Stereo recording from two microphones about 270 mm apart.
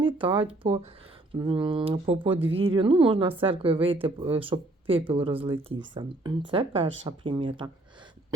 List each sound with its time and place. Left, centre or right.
0.0 s speech: centre